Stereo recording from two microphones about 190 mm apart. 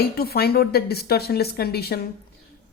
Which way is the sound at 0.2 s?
55° left (ahead or behind).